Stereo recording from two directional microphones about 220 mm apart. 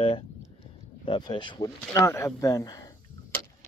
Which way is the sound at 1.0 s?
20° left (ahead or behind).